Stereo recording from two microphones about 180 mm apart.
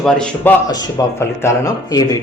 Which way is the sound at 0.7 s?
20° left (ahead or behind).